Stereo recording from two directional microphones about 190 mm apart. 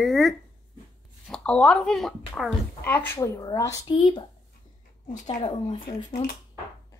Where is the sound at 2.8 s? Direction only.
10° left (ahead or behind); by 4.2 s 25° left (ahead or behind).